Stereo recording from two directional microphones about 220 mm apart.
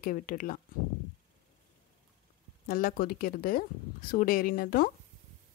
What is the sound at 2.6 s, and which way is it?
Speech, 40° left (ahead or behind).